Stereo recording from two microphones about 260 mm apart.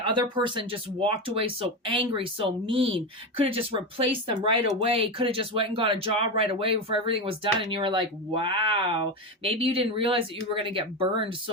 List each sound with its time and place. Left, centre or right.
0.0 s speech: centre